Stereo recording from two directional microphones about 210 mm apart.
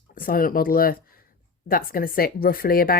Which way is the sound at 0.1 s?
45° left (ahead or behind).